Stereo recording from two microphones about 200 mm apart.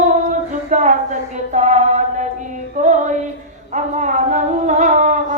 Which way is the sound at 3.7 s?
40° right (ahead or behind).